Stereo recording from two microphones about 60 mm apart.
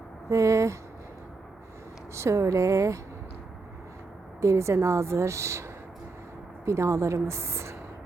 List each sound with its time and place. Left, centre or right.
0.3 s speech: right
2.1 s speech: right
4.4 s a woman's voice: right
6.7 s a woman's voice: right